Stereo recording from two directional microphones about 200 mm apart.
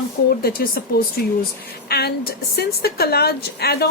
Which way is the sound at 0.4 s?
45° left (ahead or behind).